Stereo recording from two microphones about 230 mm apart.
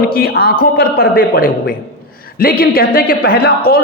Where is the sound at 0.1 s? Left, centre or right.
Left.